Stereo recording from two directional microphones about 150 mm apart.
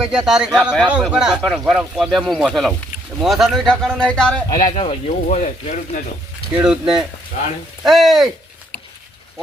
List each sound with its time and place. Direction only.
0.0 s speech: 5° right (ahead or behind)
4.4 s speech: 25° left (ahead or behind)
4.7 s speech: 40° left (ahead or behind)
6.6 s speech: 5° right (ahead or behind)